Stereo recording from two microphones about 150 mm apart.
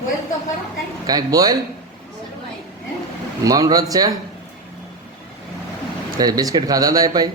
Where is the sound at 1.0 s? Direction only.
25° right (ahead or behind).